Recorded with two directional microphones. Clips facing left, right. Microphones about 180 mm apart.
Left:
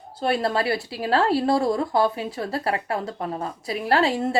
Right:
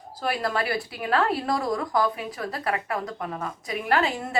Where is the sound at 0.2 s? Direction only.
25° left (ahead or behind).